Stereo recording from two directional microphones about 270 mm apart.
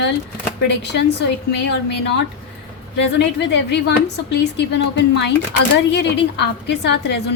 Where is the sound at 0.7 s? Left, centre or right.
Left.